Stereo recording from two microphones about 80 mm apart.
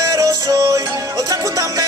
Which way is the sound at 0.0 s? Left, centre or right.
Right.